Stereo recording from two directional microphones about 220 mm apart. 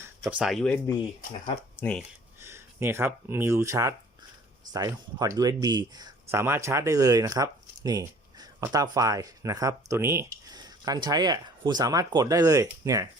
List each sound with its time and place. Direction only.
0.0 s speech: 10° right (ahead or behind)
2.4 s speech: 10° right (ahead or behind)